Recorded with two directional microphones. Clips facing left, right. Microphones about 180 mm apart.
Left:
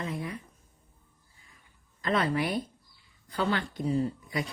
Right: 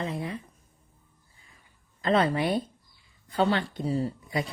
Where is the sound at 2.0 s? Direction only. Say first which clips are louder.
Right 4 dB; 25° right (ahead or behind).